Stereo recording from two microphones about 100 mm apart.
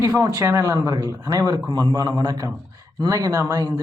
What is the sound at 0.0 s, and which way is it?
A man's voice, 35° right (ahead or behind).